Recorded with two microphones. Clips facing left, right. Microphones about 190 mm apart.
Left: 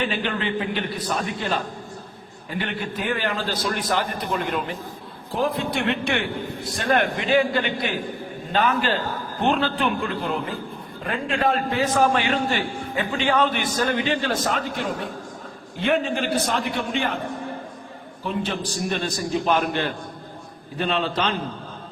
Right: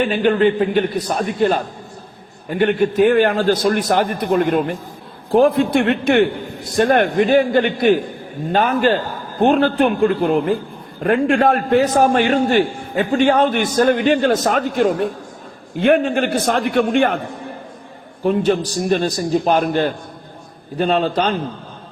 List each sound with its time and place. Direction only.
0.0 s a man's voice: 50° right (ahead or behind)
18.2 s a man's voice: 50° right (ahead or behind)